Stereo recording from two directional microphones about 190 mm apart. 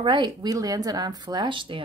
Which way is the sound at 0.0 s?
25° right (ahead or behind).